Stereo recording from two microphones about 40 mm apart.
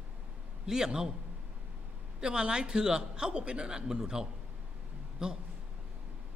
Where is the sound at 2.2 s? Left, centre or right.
Right.